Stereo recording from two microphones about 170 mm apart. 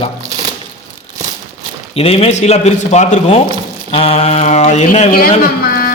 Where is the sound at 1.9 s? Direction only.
35° left (ahead or behind).